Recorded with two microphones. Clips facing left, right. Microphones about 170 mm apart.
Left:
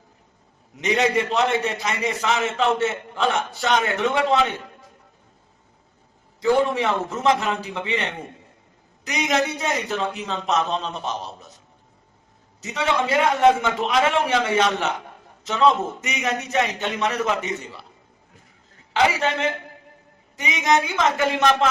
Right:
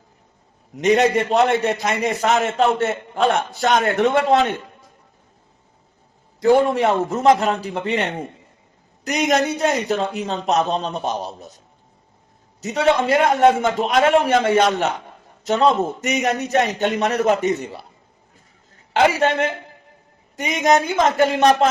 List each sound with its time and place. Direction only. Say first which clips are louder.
0.8 s a man's voice: right 5 dB; 45° right (ahead or behind)
6.4 s a man's voice: right 4 dB; 45° right (ahead or behind)
9.0 s a man's voice: right 4 dB; 45° right (ahead or behind)
12.6 s a man's voice: right 6 dB; 45° right (ahead or behind)
18.9 s a man's voice: right 4 dB; 50° right (ahead or behind); by 21.7 s 35° right (ahead or behind)